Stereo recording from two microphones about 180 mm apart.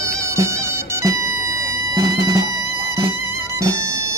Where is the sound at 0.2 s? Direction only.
15° right (ahead or behind).